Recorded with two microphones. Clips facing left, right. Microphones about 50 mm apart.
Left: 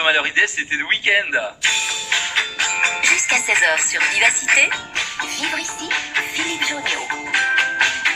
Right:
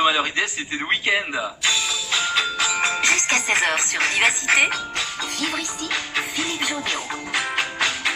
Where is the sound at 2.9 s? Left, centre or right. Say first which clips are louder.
Left 3 dB; centre.